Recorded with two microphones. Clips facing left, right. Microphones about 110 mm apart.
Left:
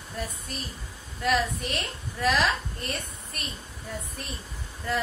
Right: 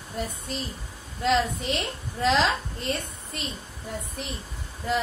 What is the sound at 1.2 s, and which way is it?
A woman's voice, 25° right (ahead or behind).